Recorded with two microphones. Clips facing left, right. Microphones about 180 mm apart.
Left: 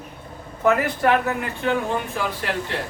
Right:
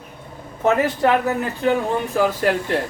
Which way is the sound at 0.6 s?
30° right (ahead or behind).